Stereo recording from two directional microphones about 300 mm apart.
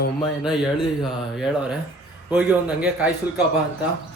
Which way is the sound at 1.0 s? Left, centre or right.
Centre.